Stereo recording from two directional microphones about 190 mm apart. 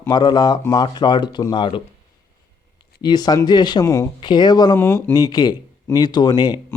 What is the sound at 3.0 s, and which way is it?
Speech, 20° left (ahead or behind).